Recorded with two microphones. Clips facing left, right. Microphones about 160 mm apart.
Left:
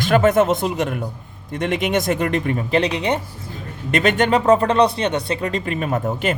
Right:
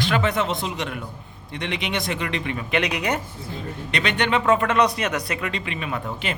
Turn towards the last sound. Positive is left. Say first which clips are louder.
# left 7 dB
turn(degrees=45)  # may be behind; listen again after turning